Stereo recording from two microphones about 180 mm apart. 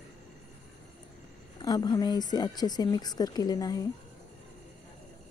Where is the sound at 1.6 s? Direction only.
20° left (ahead or behind).